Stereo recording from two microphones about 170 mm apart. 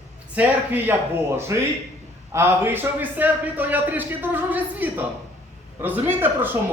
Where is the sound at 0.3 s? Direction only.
10° right (ahead or behind).